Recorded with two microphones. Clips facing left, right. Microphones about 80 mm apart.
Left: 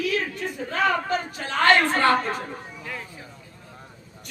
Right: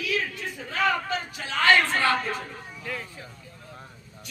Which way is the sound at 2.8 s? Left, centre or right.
Centre.